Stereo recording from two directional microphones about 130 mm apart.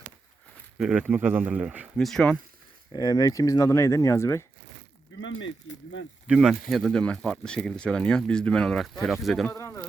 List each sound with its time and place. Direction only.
0.8 s speech: 5° right (ahead or behind)
2.9 s speech: 30° left (ahead or behind)
6.2 s speech: 5° right (ahead or behind)
9.5 s speech: 20° left (ahead or behind)